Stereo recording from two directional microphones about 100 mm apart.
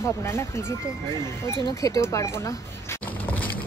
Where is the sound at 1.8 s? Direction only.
30° left (ahead or behind).